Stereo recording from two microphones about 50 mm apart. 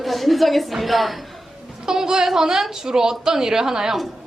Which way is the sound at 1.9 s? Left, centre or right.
Centre.